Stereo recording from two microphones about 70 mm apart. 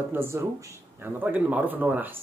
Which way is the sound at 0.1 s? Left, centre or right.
Right.